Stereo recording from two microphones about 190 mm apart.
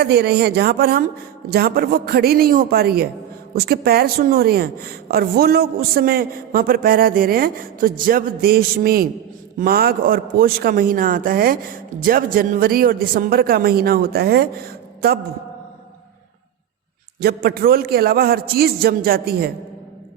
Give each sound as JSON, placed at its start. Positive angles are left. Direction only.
{"t": 0.0, "sound": "a woman's voice", "side_deg": -55}
{"t": 17.2, "sound": "a woman's voice", "side_deg": -55}